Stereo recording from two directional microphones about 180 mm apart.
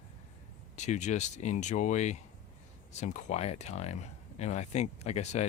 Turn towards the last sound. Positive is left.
turn(degrees=40)  # may be behind; listen again after turning